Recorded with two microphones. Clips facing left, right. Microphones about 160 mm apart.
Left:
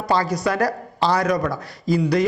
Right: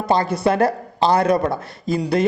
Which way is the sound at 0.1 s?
25° right (ahead or behind).